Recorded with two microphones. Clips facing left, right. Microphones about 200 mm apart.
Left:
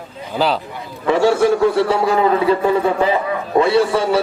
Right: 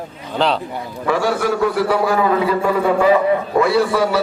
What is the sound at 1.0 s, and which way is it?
A man's voice, 25° left (ahead or behind).